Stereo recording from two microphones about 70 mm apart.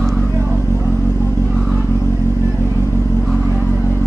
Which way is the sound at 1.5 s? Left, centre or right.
Centre.